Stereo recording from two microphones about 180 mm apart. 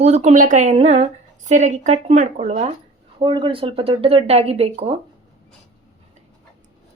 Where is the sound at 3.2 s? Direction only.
25° right (ahead or behind).